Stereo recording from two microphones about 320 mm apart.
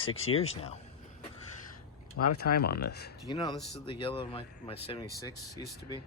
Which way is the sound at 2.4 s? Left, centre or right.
Left.